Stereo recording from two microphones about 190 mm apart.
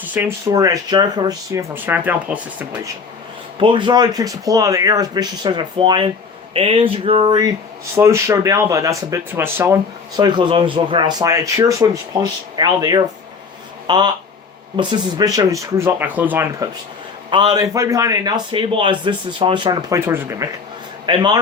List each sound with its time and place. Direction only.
0.0 s speech: 10° right (ahead or behind)
3.6 s speech: 25° right (ahead or behind)
10.2 s speech: 25° right (ahead or behind)
17.3 s speech: 20° right (ahead or behind)
20.1 s speech: 15° right (ahead or behind)